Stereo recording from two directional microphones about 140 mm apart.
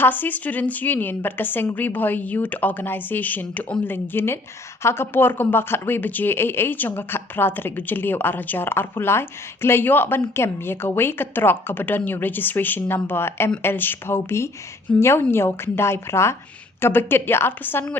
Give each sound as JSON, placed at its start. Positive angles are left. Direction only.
{"t": 0.0, "sound": "speech", "side_deg": 15}